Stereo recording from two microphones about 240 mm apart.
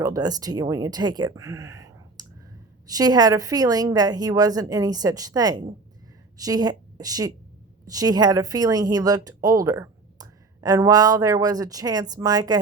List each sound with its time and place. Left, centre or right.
0.0 s a woman's voice: centre